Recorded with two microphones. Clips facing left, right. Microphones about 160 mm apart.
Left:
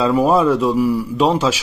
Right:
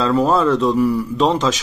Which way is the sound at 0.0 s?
10° left (ahead or behind).